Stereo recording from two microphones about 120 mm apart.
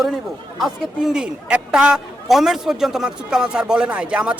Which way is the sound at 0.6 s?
5° right (ahead or behind).